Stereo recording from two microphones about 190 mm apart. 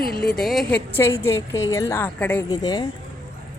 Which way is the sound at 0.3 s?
Centre (ahead or behind).